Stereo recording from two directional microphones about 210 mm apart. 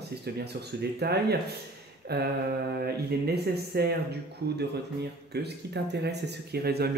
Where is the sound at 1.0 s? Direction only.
50° right (ahead or behind).